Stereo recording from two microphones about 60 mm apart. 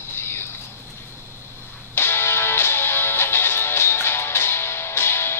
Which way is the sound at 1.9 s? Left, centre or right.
Left.